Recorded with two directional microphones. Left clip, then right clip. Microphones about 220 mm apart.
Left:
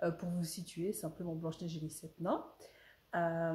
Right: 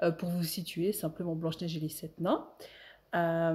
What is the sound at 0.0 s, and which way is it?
Speech, 35° right (ahead or behind).